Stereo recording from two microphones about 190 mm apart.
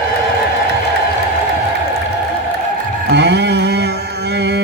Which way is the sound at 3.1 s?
65° right (ahead or behind).